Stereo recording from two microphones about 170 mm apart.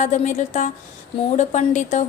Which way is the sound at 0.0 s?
45° left (ahead or behind).